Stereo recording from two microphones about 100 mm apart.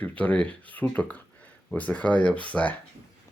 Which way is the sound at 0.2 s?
15° left (ahead or behind).